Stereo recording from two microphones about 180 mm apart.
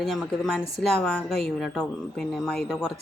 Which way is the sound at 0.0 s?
Centre (ahead or behind).